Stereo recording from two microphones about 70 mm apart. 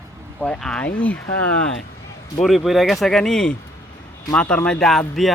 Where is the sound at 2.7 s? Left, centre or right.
Centre.